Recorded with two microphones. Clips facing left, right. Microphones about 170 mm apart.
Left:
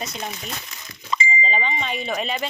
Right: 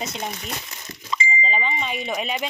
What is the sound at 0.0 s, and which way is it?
Speech, 25° right (ahead or behind).